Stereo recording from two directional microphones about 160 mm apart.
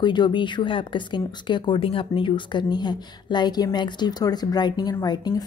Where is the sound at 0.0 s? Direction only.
30° left (ahead or behind).